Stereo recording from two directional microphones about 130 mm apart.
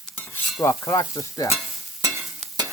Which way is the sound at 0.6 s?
25° left (ahead or behind).